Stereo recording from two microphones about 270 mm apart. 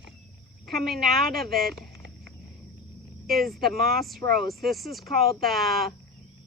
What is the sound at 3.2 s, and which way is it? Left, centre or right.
Speech, centre.